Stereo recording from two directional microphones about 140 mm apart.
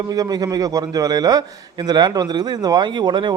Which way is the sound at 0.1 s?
30° right (ahead or behind).